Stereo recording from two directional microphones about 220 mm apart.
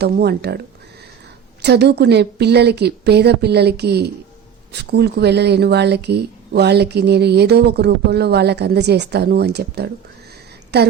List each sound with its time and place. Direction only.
0.0 s speech: 50° right (ahead or behind)
1.6 s speech: 50° right (ahead or behind)